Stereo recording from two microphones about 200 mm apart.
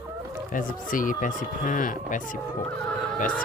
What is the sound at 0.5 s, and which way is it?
Speech, 40° left (ahead or behind).